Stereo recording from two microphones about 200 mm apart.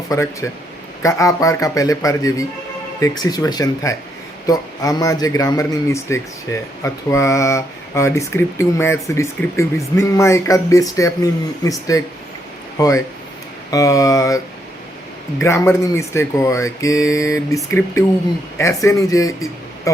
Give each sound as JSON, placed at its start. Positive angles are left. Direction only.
{"t": 0.1, "sound": "speech", "side_deg": 15}